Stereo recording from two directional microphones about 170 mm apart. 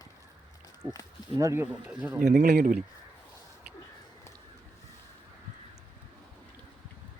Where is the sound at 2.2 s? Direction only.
45° right (ahead or behind).